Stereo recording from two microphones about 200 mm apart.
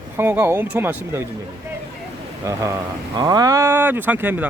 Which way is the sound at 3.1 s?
20° right (ahead or behind).